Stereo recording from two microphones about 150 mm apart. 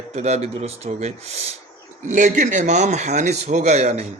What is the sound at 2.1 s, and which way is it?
A man's voice, 60° right (ahead or behind).